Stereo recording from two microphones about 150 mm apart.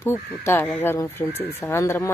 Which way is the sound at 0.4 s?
15° left (ahead or behind).